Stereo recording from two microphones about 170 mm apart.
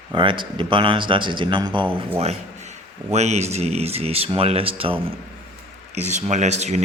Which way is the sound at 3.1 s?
40° right (ahead or behind).